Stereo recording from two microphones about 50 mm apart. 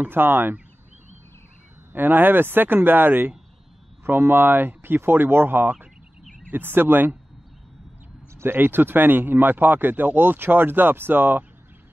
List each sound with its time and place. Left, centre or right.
0.0 s speech: right
1.9 s speech: right
8.4 s speech: right